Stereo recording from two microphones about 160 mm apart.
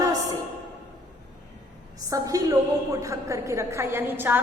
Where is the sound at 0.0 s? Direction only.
25° right (ahead or behind).